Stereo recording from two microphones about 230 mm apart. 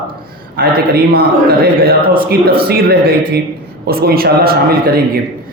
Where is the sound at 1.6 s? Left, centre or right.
Right.